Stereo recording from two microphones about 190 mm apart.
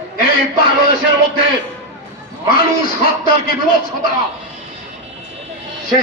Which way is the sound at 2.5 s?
50° left (ahead or behind).